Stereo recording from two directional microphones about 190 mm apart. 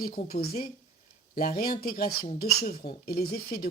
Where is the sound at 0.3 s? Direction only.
50° left (ahead or behind).